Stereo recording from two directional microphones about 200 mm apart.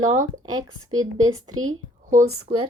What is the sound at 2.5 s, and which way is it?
Speech, 50° right (ahead or behind).